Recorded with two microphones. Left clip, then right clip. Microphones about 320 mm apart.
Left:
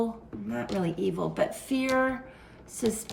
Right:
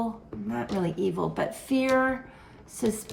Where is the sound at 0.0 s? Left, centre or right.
Centre.